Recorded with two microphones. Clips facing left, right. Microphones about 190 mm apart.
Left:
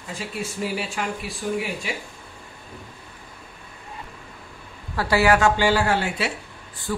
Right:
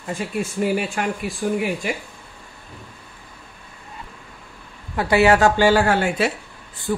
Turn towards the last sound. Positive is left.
turn(degrees=-20)  # may be behind; listen again after turning